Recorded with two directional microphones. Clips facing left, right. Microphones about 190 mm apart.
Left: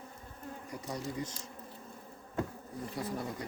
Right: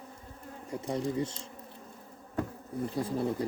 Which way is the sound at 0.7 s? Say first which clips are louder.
Right 8 dB; 25° right (ahead or behind).